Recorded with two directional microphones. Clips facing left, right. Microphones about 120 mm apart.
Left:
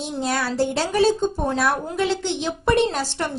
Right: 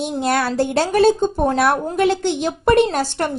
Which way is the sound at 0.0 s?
60° right (ahead or behind).